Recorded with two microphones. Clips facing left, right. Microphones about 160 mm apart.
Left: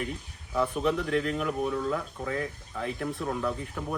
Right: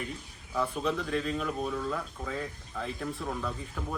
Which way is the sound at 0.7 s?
15° left (ahead or behind).